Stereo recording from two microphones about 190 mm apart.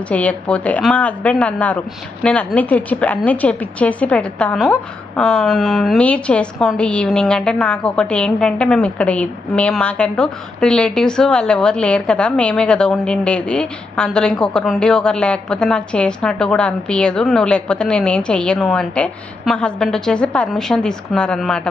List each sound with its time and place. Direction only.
0.1 s a woman's voice: 5° left (ahead or behind)